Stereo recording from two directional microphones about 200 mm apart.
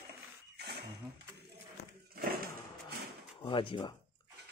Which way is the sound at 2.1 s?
50° right (ahead or behind).